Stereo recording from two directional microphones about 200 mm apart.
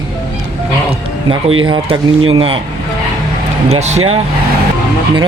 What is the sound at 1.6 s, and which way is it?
Speech, 25° right (ahead or behind).